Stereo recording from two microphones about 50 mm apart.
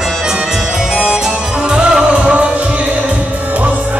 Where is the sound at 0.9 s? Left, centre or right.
Centre.